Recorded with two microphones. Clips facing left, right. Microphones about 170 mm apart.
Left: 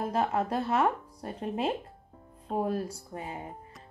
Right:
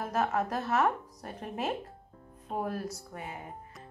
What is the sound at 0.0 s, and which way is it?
Speech, 30° left (ahead or behind).